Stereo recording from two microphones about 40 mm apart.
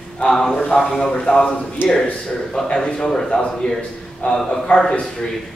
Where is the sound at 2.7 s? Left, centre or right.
Left.